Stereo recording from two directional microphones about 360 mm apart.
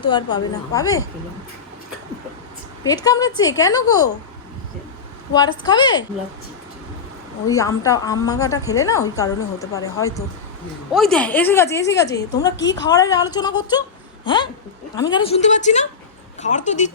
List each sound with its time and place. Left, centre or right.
0.0 s a woman's voice: centre
2.8 s a woman's voice: centre
5.3 s a woman's voice: centre
7.5 s a woman's voice: centre
12.5 s a woman's voice: left
12.9 s a woman's voice: centre